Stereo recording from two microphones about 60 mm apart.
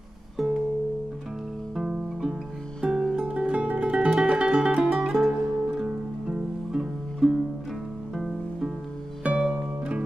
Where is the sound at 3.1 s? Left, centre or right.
Centre.